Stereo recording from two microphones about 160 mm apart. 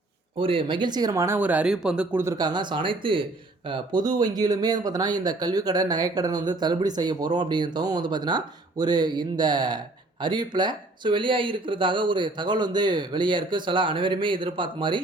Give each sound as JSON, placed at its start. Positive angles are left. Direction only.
{"t": 0.3, "sound": "speech", "side_deg": -35}
{"t": 2.2, "sound": "speech", "side_deg": -25}